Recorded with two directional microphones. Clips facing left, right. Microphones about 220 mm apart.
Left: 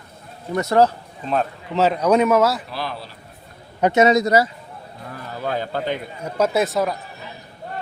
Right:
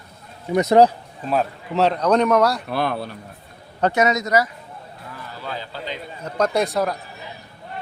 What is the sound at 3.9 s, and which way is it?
Speech, 30° left (ahead or behind).